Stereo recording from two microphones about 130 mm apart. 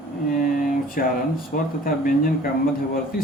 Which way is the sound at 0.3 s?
90° left.